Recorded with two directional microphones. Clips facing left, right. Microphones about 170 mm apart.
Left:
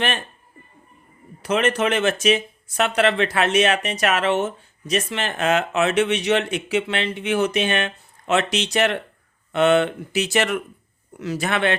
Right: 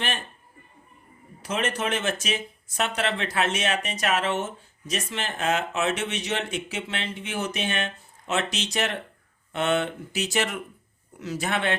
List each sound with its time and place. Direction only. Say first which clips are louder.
1.4 s speech: left 7 dB; 70° left (ahead or behind)